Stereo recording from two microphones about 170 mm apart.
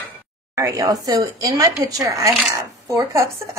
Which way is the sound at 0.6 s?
20° right (ahead or behind).